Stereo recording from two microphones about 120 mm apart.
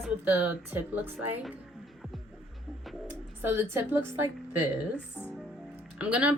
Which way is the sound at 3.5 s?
20° right (ahead or behind).